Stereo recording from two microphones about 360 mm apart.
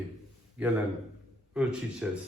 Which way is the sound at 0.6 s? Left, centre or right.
Centre.